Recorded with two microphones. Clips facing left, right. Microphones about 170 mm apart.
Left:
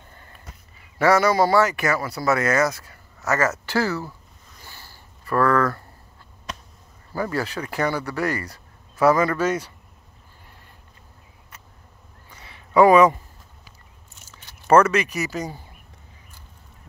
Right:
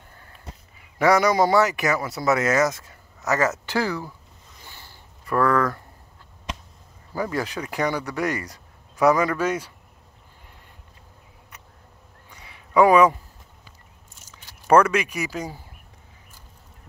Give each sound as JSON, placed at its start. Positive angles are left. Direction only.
{"t": 0.9, "sound": "speech", "side_deg": -15}
{"t": 4.6, "sound": "a sound", "side_deg": -20}
{"t": 7.1, "sound": "speech", "side_deg": -15}
{"t": 12.3, "sound": "a sound", "side_deg": -10}
{"t": 12.8, "sound": "speech", "side_deg": -10}
{"t": 14.3, "sound": "speech", "side_deg": -10}